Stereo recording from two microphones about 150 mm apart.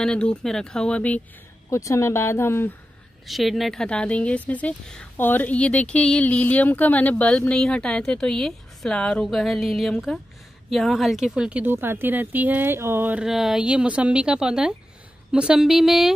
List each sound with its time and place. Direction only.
0.0 s speech: 5° left (ahead or behind)
1.7 s speech: 20° left (ahead or behind)
3.3 s speech: centre (ahead or behind)